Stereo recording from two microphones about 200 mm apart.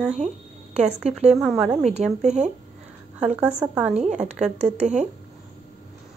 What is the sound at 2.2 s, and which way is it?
Speech, 35° right (ahead or behind).